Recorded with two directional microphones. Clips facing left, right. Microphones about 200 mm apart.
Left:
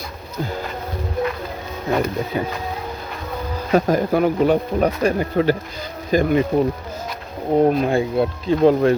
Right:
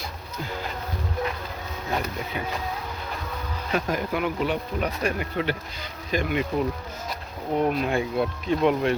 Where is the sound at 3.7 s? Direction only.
40° left (ahead or behind).